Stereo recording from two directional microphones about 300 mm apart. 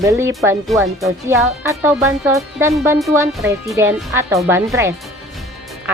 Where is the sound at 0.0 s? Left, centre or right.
Centre.